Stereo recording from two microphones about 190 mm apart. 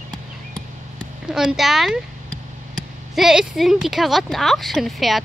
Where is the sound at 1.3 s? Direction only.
5° right (ahead or behind).